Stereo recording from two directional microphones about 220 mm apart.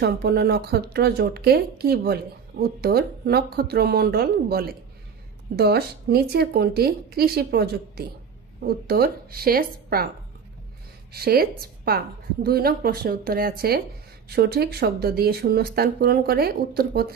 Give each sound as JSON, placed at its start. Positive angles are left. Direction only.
{"t": 0.0, "sound": "speech", "side_deg": -50}
{"t": 11.1, "sound": "a woman's voice", "side_deg": -45}